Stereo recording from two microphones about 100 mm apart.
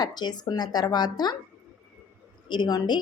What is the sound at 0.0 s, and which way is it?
A woman's voice, 45° left (ahead or behind).